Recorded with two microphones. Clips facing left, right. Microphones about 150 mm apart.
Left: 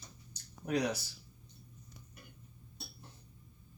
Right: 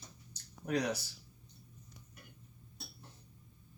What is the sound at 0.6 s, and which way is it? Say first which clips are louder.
Speech: left 1 dB; 10° left (ahead or behind).